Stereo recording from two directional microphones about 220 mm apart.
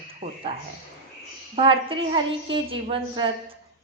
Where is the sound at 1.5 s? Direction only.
25° right (ahead or behind).